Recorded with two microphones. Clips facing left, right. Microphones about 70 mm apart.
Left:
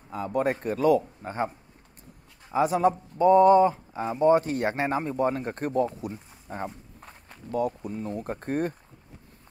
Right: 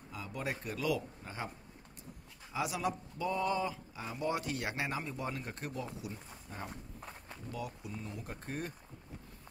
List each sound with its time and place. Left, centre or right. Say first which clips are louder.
0.1 s speech: left 14 dB; left
2.5 s speech: left 13 dB; left